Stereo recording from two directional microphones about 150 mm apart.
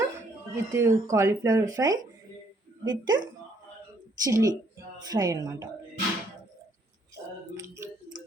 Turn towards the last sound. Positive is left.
turn(degrees=-20)  # may be behind; listen again after turning